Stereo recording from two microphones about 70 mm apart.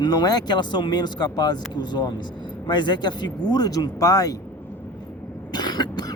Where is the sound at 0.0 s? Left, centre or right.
Left.